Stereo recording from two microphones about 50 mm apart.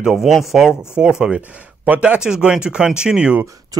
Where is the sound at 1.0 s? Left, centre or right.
Right.